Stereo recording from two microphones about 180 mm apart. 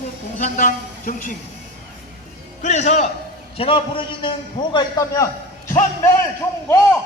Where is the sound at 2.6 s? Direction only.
40° left (ahead or behind); by 5.3 s 20° left (ahead or behind).